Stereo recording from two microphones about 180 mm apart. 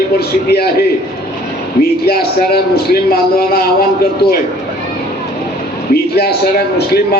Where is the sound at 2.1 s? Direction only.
55° left (ahead or behind).